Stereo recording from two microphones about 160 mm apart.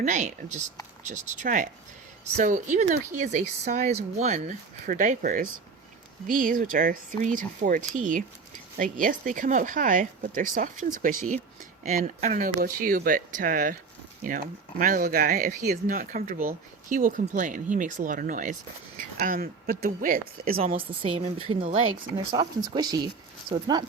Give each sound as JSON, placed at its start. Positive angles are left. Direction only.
{"t": 0.0, "sound": "speech", "side_deg": -50}
{"t": 20.7, "sound": "speech", "side_deg": -35}
{"t": 22.3, "sound": "speech", "side_deg": -25}